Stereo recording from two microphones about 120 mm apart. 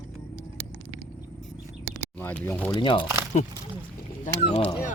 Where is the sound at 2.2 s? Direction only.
15° left (ahead or behind).